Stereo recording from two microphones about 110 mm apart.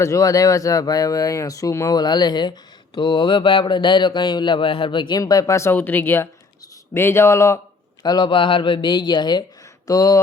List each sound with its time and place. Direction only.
0.0 s speech: 30° left (ahead or behind)
8.0 s speech: 45° left (ahead or behind)